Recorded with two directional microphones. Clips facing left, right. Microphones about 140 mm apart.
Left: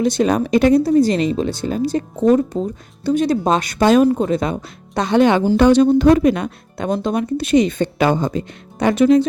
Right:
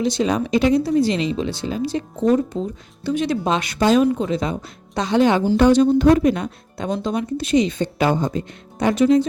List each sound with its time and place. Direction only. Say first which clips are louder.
0.0 s speech: left 3 dB; 50° left (ahead or behind)
4.0 s speech: left 3 dB; 40° left (ahead or behind); by 5.4 s 60° left (ahead or behind)
5.5 s speech: left 2 dB; 75° left (ahead or behind)
8.8 s speech: left 3 dB; 65° left (ahead or behind)